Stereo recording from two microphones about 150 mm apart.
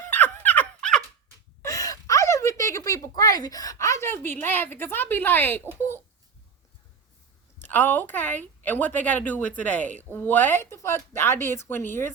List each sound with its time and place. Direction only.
0.1 s a sound: 10° left (ahead or behind)
1.6 s speech: 20° left (ahead or behind)
7.7 s a woman's voice: 10° left (ahead or behind)